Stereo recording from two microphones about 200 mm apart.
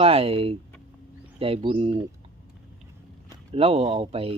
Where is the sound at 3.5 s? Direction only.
30° right (ahead or behind).